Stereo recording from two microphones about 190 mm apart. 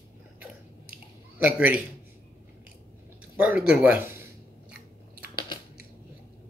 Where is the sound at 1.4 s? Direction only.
10° right (ahead or behind).